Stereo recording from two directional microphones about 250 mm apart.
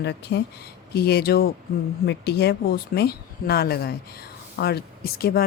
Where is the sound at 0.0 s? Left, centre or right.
Left.